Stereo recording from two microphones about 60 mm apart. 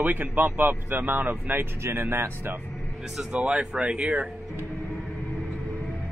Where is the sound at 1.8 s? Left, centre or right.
Right.